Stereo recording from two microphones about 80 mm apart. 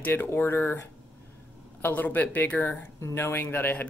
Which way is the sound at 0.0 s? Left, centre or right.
Left.